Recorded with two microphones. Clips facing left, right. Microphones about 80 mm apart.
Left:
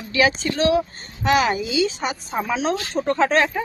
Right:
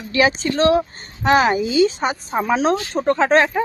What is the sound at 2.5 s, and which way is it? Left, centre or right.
Speech, right.